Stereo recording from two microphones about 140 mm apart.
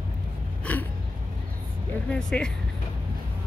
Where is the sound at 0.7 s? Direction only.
10° left (ahead or behind).